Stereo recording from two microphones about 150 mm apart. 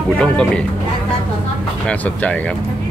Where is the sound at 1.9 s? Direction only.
10° left (ahead or behind).